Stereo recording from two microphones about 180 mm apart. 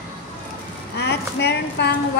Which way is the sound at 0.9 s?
65° left (ahead or behind).